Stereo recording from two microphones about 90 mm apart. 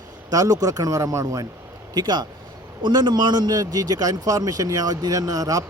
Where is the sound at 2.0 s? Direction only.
50° right (ahead or behind).